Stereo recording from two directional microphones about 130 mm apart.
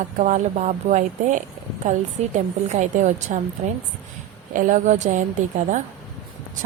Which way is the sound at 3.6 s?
55° right (ahead or behind).